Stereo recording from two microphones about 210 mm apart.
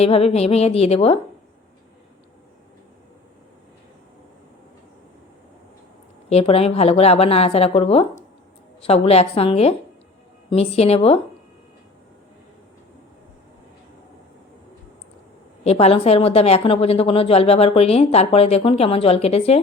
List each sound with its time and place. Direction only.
0.0 s a woman's voice: 30° left (ahead or behind)
6.2 s a woman's voice: 30° left (ahead or behind)
15.6 s a woman's voice: 30° left (ahead or behind)